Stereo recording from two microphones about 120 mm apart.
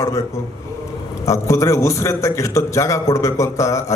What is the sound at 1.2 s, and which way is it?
A man's voice, 25° left (ahead or behind).